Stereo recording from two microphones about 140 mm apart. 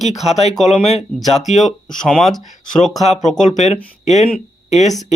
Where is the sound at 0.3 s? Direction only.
50° left (ahead or behind).